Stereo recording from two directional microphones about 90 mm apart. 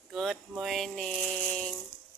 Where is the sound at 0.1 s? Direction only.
Centre (ahead or behind).